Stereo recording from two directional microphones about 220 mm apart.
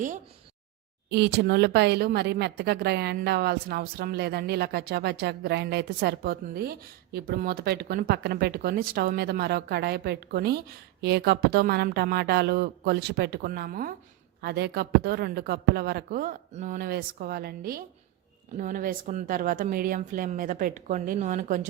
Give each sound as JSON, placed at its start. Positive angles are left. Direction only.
{"t": 1.1, "sound": "a woman's voice", "side_deg": -50}